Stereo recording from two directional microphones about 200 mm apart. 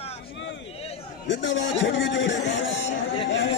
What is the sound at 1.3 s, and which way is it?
A man's voice, 65° left (ahead or behind).